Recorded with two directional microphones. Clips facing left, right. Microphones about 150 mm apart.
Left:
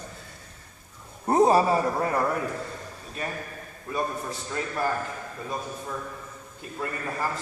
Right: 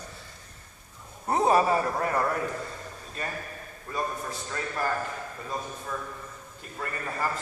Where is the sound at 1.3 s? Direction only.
30° left (ahead or behind).